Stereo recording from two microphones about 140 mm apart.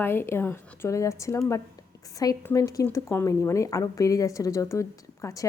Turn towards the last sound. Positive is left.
turn(degrees=25)  # may be behind; listen again after turning